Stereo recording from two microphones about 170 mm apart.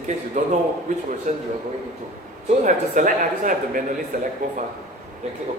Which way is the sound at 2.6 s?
50° right (ahead or behind).